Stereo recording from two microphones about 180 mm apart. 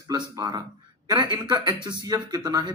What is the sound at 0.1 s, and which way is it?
Speech, 20° right (ahead or behind).